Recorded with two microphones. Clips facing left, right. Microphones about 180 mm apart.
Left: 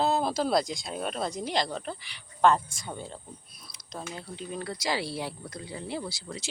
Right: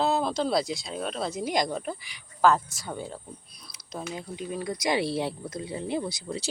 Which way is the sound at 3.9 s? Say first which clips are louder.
Right 3 dB; 5° right (ahead or behind).